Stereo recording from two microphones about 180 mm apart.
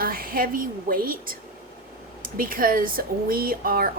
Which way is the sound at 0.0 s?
55° right (ahead or behind).